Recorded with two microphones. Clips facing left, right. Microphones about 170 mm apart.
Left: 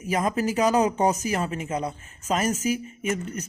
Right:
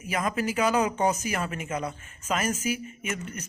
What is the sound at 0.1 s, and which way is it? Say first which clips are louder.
Speech: left 4 dB; 35° left (ahead or behind).